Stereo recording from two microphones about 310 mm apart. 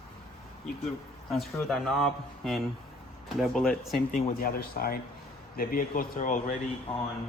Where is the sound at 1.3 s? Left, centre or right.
Centre.